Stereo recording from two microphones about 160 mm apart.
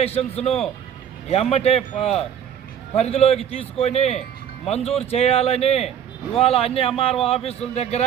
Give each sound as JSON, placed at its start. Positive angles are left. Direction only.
{"t": 0.0, "sound": "a man's voice", "side_deg": 40}